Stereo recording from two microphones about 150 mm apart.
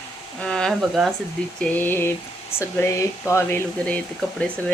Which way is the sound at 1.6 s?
10° left (ahead or behind).